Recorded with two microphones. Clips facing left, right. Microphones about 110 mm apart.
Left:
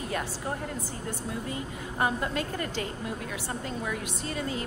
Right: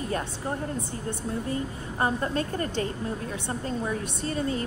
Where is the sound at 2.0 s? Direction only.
35° right (ahead or behind).